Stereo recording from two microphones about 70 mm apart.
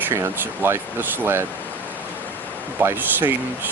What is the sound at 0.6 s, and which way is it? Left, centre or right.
Speech, right.